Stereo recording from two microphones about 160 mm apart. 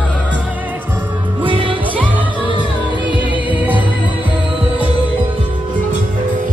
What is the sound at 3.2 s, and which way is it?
Music, 10° right (ahead or behind).